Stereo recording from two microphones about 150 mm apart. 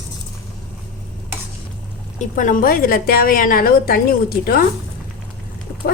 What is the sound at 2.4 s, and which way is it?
A woman's voice, 70° left (ahead or behind).